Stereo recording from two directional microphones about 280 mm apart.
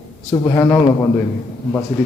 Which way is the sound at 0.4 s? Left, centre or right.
Centre.